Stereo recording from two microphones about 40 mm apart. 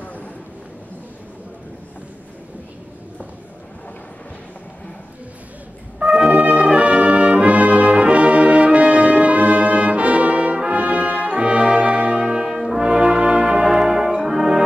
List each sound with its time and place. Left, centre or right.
6.1 s brass instrument: centre; by 11.3 s right
11.3 s brass instrument: right
12.2 s brass instrument: centre
12.8 s brass instrument: right